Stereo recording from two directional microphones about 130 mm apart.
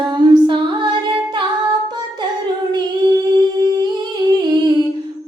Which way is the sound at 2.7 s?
30° right (ahead or behind).